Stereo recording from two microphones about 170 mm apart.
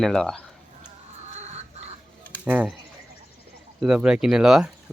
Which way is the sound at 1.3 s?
40° right (ahead or behind).